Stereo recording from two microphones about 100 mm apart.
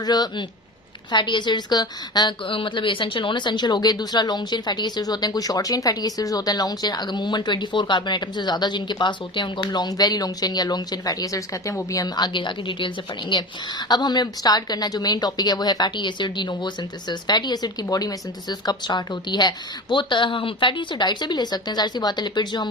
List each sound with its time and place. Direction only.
0.0 s a woman's voice: 45° left (ahead or behind)